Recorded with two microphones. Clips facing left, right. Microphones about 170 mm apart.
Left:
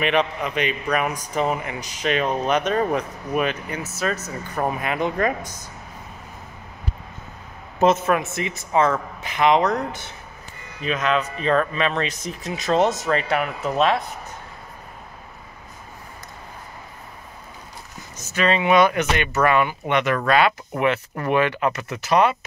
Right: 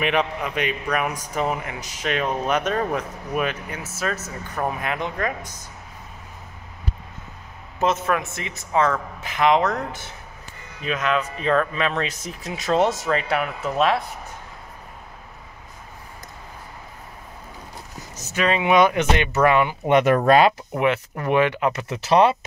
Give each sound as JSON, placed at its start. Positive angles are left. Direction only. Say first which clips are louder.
{"t": 0.0, "sound": "a man's voice", "louder": "left 1 dB", "side_deg": -10}
{"t": 8.2, "sound": "a man's voice", "louder": "left 5 dB", "side_deg": 5}
{"t": 10.8, "sound": "a man's voice", "louder": "left 1 dB", "side_deg": -5}
{"t": 18.3, "sound": "speech", "louder": "left 1 dB", "side_deg": -15}
{"t": 19.9, "sound": "speech", "louder": "right 6 dB", "side_deg": -40}
{"t": 20.7, "sound": "speech", "louder": "even", "side_deg": -15}